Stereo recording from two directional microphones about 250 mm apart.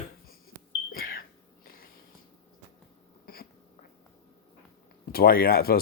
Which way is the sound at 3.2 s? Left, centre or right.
Left.